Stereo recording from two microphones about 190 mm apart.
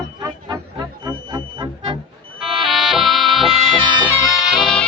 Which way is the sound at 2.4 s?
Centre (ahead or behind).